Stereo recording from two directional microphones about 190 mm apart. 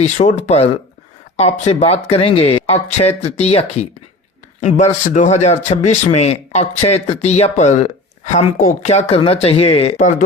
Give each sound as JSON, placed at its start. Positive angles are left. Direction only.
{"t": 0.0, "sound": "speech", "side_deg": 35}